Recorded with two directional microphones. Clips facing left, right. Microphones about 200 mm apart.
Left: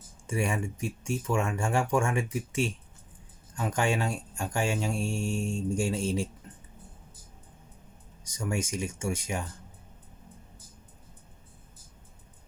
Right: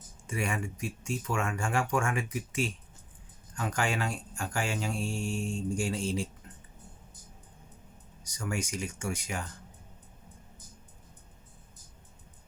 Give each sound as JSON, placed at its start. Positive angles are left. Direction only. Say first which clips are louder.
{"t": 0.3, "sound": "speech", "louder": "left 3 dB", "side_deg": 25}
{"t": 8.2, "sound": "speech", "louder": "left 3 dB", "side_deg": 25}